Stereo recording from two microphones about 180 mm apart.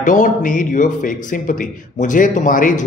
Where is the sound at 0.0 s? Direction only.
45° left (ahead or behind).